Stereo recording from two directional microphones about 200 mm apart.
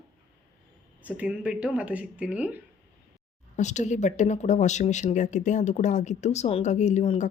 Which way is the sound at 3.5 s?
35° left (ahead or behind).